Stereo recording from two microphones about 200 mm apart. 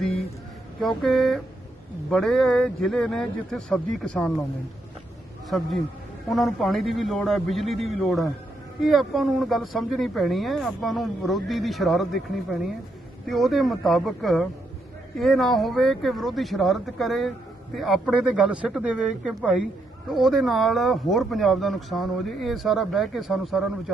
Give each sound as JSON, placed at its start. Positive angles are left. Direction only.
{"t": 0.8, "sound": "speech", "side_deg": 0}
{"t": 5.5, "sound": "speech", "side_deg": 0}